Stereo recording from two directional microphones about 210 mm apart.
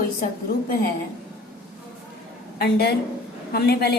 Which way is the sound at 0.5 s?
45° left (ahead or behind).